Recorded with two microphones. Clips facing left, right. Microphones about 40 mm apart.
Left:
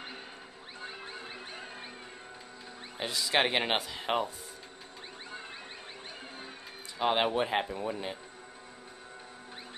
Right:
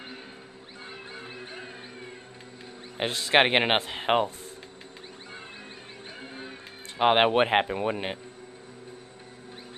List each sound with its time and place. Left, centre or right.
3.0 s speech: right
7.0 s speech: right